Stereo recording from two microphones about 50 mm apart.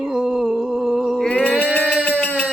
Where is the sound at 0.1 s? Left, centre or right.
Centre.